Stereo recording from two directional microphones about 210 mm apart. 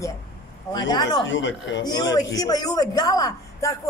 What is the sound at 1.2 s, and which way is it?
Speech, 60° left (ahead or behind).